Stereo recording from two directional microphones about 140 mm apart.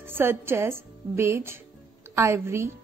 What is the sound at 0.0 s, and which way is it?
A woman's voice, 15° right (ahead or behind).